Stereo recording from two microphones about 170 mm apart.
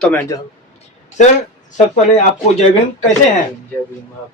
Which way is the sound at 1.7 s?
45° left (ahead or behind).